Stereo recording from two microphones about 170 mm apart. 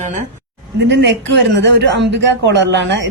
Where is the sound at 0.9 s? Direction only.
90° right.